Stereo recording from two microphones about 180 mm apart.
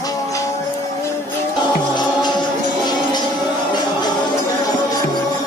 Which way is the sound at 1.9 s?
25° left (ahead or behind).